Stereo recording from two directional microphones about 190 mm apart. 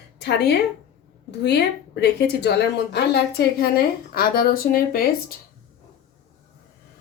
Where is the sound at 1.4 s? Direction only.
65° left (ahead or behind).